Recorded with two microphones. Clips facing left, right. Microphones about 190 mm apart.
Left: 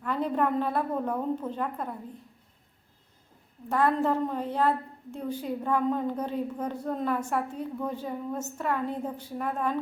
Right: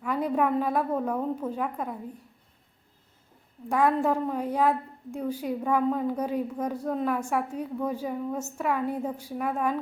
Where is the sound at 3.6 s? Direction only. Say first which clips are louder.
Right 1 dB; 10° right (ahead or behind).